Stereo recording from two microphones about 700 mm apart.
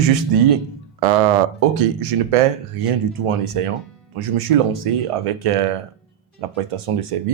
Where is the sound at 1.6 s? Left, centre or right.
Right.